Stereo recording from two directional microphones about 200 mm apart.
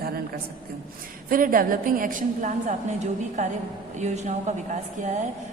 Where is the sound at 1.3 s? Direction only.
45° right (ahead or behind).